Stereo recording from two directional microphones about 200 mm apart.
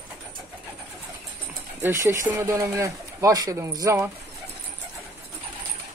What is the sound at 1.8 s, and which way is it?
Speech, 10° right (ahead or behind).